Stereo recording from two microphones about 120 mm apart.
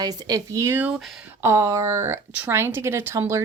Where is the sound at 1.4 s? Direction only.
25° right (ahead or behind).